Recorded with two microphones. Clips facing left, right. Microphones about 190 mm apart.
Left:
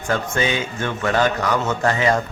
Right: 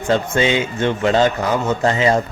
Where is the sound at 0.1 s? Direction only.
20° right (ahead or behind).